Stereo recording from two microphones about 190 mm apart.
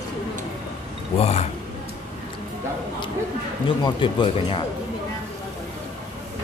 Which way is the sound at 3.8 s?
25° left (ahead or behind).